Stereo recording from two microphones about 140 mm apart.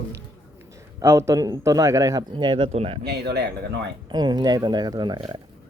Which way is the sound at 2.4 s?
35° right (ahead or behind).